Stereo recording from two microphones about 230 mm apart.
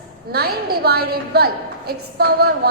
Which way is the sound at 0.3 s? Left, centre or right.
Right.